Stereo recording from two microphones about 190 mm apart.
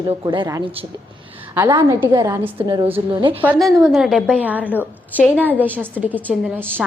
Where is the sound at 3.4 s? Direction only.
5° right (ahead or behind).